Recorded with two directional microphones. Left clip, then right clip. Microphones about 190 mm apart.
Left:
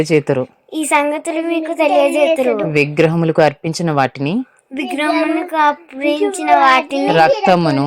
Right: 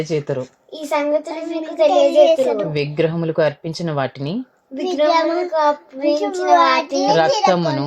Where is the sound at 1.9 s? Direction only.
40° left (ahead or behind).